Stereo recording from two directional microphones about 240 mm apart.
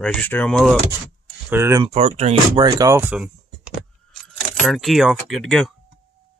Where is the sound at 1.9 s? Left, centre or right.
Right; by 5.7 s centre.